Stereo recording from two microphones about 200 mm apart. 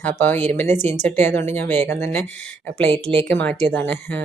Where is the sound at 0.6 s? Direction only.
35° right (ahead or behind).